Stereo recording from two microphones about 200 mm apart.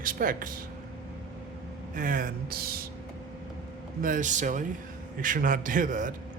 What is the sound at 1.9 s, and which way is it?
Speech, 45° right (ahead or behind).